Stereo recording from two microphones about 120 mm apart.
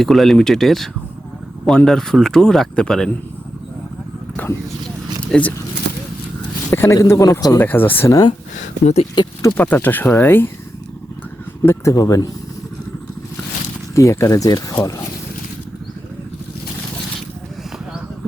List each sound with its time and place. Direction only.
0.0 s speech: centre (ahead or behind)
5.3 s speech: 10° left (ahead or behind)
6.7 s speech: 25° left (ahead or behind)
7.6 s speech: 15° left (ahead or behind)
8.5 s speech: 60° left (ahead or behind)
9.6 s speech: 15° left (ahead or behind)
11.6 s speech: 25° left (ahead or behind)
13.9 s speech: 25° left (ahead or behind)